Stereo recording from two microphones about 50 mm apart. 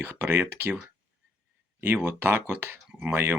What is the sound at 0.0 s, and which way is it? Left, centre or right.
Speech, right.